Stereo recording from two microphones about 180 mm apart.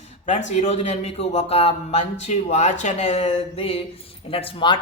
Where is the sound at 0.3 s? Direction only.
40° left (ahead or behind).